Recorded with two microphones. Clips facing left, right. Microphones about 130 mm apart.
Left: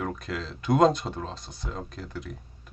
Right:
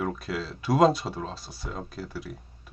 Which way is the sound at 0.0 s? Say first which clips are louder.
Right 2 dB; 5° right (ahead or behind).